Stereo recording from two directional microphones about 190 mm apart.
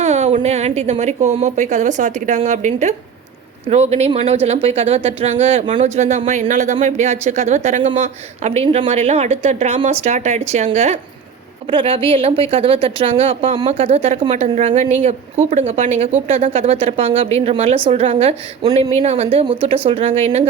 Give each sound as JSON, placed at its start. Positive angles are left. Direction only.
{"t": 0.0, "sound": "speech", "side_deg": -35}